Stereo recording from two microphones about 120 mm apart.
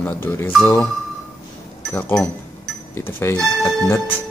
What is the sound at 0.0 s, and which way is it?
Speech, 20° left (ahead or behind).